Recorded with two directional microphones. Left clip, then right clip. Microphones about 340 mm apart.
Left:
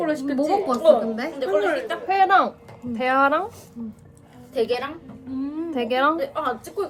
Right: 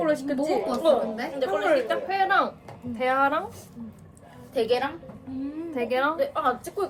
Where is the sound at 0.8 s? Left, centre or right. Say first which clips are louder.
Left 5 dB; centre.